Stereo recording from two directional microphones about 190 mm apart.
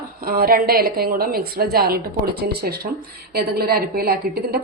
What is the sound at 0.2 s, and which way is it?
A woman's voice, 50° right (ahead or behind).